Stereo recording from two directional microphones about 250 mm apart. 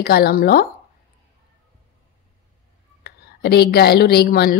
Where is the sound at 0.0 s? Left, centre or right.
Left.